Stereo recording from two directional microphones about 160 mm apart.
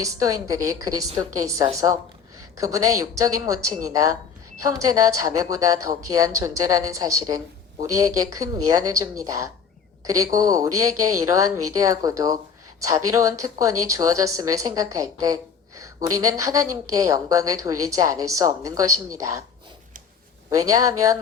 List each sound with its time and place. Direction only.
0.0 s speech: 20° right (ahead or behind)
20.5 s speech: 20° right (ahead or behind)